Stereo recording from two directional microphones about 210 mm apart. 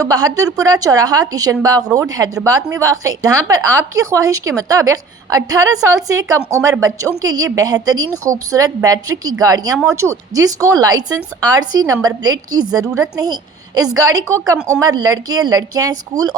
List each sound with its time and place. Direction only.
0.0 s speech: 15° right (ahead or behind)